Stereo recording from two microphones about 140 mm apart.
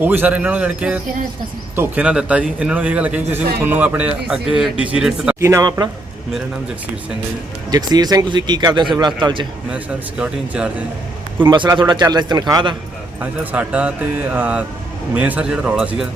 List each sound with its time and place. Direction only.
0.0 s a man's voice: 15° right (ahead or behind)
5.4 s speech: 20° right (ahead or behind)
7.7 s a man's voice: 30° right (ahead or behind)
9.7 s a man's voice: 10° right (ahead or behind)
11.5 s a man's voice: 35° right (ahead or behind)
13.1 s a man's voice: 10° right (ahead or behind)